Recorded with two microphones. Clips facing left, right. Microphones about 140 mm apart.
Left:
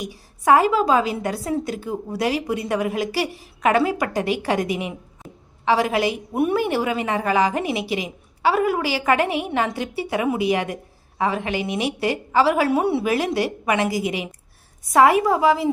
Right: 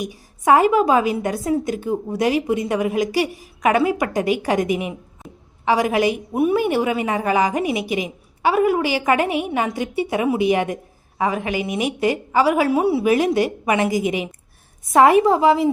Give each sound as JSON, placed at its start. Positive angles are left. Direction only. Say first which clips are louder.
{"t": 0.1, "sound": "a woman's voice", "louder": "even", "side_deg": -20}
{"t": 12.7, "sound": "a woman's voice", "louder": "right 2 dB", "side_deg": -5}
{"t": 13.1, "sound": "a woman's voice", "louder": "right 4 dB", "side_deg": -20}